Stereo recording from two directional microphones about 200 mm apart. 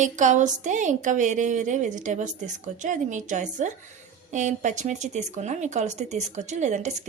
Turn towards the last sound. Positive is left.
turn(degrees=-35)  # may be behind; listen again after turning